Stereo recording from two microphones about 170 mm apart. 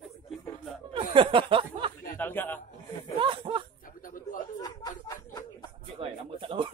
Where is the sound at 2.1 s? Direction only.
10° left (ahead or behind).